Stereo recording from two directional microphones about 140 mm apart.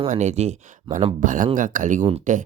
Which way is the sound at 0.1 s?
55° right (ahead or behind).